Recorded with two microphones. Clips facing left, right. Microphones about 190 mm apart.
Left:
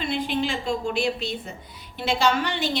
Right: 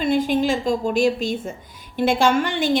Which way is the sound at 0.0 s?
45° right (ahead or behind).